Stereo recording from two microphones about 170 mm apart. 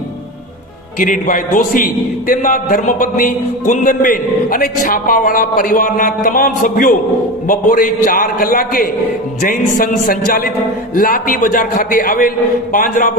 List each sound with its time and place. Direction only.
0.9 s a man's voice: 50° left (ahead or behind)